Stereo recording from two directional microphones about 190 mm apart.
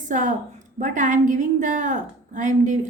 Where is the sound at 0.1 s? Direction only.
40° right (ahead or behind).